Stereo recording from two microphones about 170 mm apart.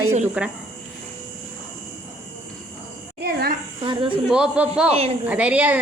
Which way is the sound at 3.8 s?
30° right (ahead or behind).